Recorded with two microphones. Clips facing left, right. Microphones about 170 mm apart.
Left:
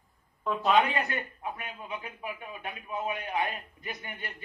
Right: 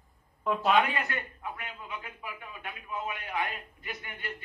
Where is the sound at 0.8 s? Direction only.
20° left (ahead or behind).